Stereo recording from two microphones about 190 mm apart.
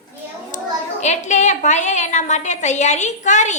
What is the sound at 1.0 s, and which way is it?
A woman's voice, 40° left (ahead or behind).